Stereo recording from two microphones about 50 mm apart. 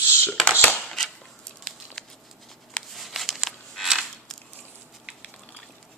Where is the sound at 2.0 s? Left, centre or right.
Centre.